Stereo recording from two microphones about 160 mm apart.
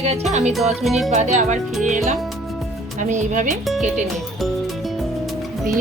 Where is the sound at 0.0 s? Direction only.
40° right (ahead or behind).